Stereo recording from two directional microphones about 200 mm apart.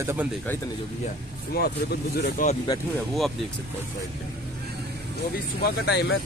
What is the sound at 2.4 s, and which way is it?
Speech, 45° left (ahead or behind).